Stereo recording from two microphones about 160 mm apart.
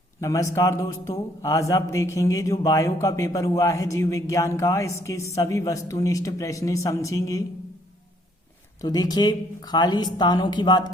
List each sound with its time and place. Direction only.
0.2 s a man's voice: 20° left (ahead or behind)
8.8 s a man's voice: 25° left (ahead or behind)